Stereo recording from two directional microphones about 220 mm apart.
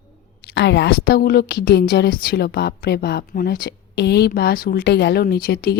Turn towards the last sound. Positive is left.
turn(degrees=45)  # may be behind; listen again after turning